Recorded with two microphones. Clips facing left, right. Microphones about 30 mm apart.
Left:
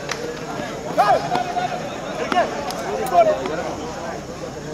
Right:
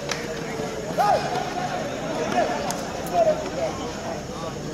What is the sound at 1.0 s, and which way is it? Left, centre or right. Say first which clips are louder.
Speech: left 4 dB; left.